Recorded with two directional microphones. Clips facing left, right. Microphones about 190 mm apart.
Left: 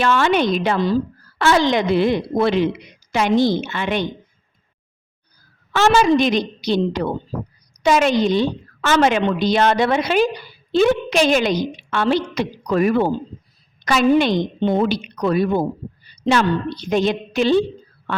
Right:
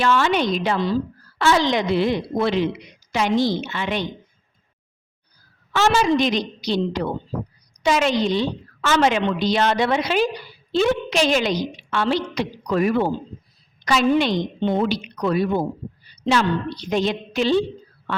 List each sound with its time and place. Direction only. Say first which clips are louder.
0.0 s a woman's voice: left 2 dB; 55° left (ahead or behind)
5.7 s a woman's voice: left 3 dB; 55° left (ahead or behind)